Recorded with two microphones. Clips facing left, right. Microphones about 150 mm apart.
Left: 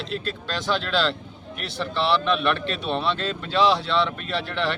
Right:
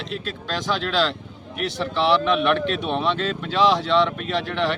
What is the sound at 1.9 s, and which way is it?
Speech, 10° right (ahead or behind).